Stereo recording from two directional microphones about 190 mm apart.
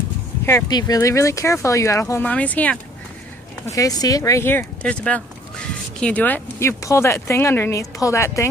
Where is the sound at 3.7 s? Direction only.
20° left (ahead or behind).